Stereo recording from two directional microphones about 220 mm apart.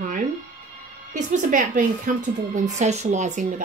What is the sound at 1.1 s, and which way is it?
A woman's voice, 35° right (ahead or behind).